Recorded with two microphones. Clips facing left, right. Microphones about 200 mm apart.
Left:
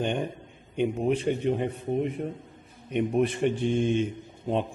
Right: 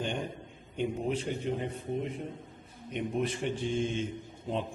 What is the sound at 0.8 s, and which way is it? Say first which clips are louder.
A man's voice: left 6 dB; 60° left (ahead or behind).